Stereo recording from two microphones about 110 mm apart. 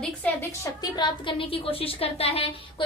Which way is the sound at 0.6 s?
40° left (ahead or behind).